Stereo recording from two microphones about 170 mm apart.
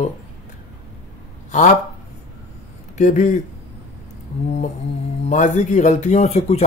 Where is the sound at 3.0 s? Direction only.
45° left (ahead or behind).